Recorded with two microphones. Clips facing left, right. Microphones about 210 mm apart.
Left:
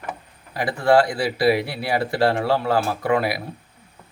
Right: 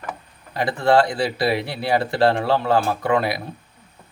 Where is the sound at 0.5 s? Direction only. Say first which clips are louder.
Even; 25° right (ahead or behind).